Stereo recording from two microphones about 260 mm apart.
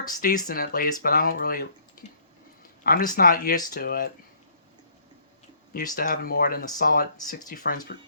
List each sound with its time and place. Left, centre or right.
0.2 s speech: left
5.7 s speech: left